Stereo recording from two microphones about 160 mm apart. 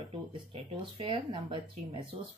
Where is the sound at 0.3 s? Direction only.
35° right (ahead or behind).